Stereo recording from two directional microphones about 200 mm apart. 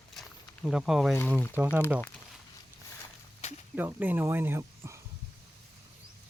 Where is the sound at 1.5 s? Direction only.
10° right (ahead or behind).